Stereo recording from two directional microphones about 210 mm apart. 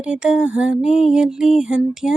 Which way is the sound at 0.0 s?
5° right (ahead or behind).